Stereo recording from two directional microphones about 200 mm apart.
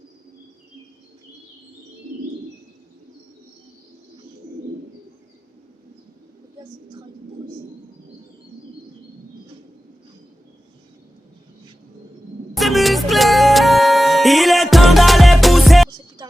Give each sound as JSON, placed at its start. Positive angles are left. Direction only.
{"t": 12.5, "sound": "music", "side_deg": 0}
{"t": 15.9, "sound": "music", "side_deg": -20}